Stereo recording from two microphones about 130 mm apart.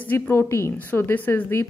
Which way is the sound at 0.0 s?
15° left (ahead or behind).